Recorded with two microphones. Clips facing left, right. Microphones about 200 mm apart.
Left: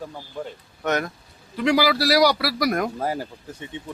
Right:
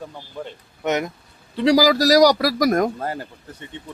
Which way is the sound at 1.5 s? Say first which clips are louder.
Right 4 dB; 35° right (ahead or behind).